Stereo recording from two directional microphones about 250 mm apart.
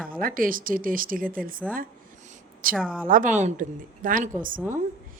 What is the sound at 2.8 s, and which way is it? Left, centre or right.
Speech, centre.